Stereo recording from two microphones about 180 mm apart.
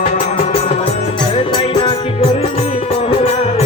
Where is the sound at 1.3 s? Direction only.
25° left (ahead or behind).